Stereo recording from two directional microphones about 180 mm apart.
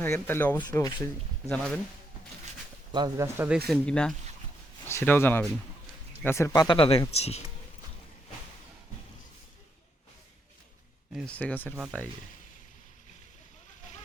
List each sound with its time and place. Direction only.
0.0 s speech: 10° left (ahead or behind)
2.9 s speech: 25° right (ahead or behind)
3.3 s speech: 10° right (ahead or behind)
3.7 s speech: 5° left (ahead or behind); by 7.4 s 35° left (ahead or behind)
11.1 s speech: centre (ahead or behind)
11.7 s speech: 5° right (ahead or behind)